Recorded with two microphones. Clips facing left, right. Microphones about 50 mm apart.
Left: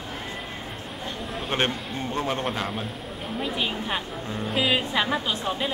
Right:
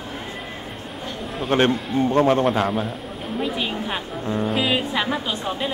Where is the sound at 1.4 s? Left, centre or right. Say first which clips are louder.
Right 8 dB; centre.